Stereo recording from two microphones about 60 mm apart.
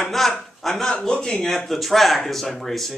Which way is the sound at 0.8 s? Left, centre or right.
Centre.